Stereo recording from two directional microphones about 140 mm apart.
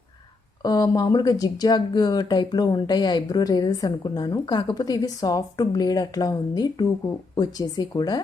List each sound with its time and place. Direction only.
0.6 s speech: 30° left (ahead or behind)